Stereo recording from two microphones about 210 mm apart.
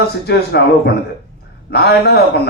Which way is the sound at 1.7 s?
50° left (ahead or behind).